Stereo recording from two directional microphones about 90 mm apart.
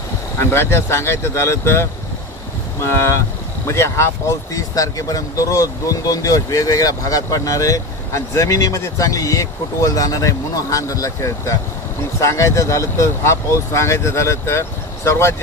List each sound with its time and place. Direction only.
0.4 s speech: 25° left (ahead or behind)